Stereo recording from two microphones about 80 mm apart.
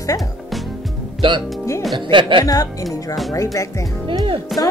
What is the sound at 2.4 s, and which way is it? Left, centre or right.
Speech, left.